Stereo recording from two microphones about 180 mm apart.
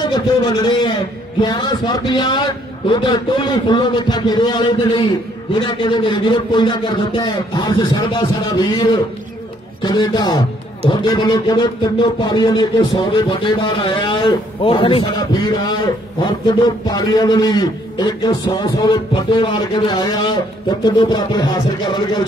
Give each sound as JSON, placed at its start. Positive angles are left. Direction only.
{"t": 0.0, "sound": "speech", "side_deg": 25}